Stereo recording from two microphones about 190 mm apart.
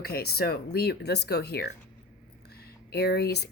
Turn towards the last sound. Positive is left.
turn(degrees=60)  # may be behind; listen again after turning